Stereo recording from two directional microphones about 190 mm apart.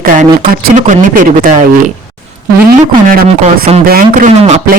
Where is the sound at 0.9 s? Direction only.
45° right (ahead or behind).